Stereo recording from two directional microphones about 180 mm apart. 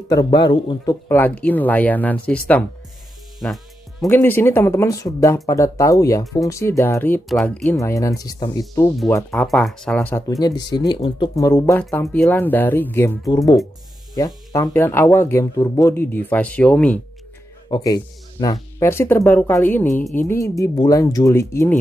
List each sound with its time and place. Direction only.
0.1 s a man's voice: 25° left (ahead or behind)
1.0 s speech: 10° left (ahead or behind)
3.3 s music: centre (ahead or behind)
4.1 s speech: 10° left (ahead or behind)
7.7 s a man's voice: 15° left (ahead or behind)
9.3 s speech: centre (ahead or behind)
10.4 s a man's voice: 20° left (ahead or behind); by 17.0 s 5° left (ahead or behind)
17.6 s speech: 25° left (ahead or behind)